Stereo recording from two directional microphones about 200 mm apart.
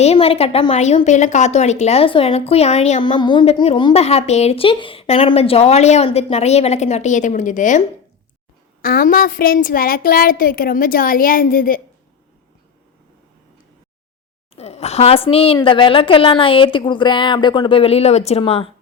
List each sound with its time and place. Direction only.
0.0 s a woman's voice: 30° left (ahead or behind)
14.5 s a woman's voice: 30° left (ahead or behind)